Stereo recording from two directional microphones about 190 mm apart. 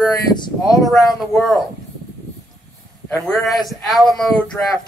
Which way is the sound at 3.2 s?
Centre (ahead or behind).